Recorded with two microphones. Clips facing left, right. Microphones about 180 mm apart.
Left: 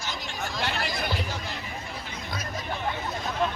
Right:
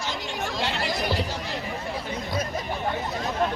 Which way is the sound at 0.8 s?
75° right (ahead or behind).